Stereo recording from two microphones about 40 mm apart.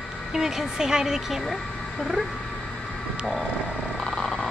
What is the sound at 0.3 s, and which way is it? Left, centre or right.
Speech, centre.